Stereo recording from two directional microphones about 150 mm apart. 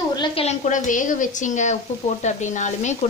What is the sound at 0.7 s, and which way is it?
Speech, 60° left (ahead or behind).